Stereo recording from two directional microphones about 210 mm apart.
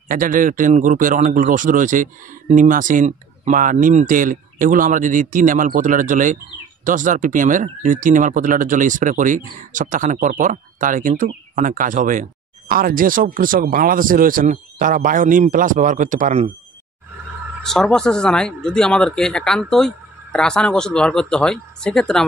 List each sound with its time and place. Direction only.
0.1 s speech: 40° right (ahead or behind)
17.6 s speech: 5° left (ahead or behind)